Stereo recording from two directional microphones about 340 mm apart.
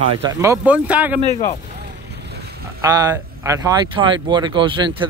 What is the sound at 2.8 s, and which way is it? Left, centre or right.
Speech, centre.